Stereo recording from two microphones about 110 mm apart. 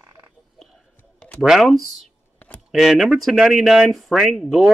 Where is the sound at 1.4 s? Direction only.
Centre (ahead or behind).